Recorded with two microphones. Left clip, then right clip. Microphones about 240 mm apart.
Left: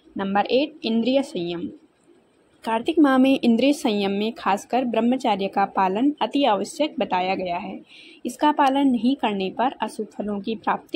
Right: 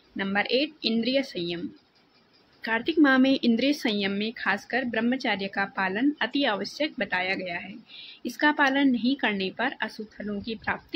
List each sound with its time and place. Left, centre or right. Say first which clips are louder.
0.3 s speech: left 5 dB; centre
2.6 s speech: left 3 dB; centre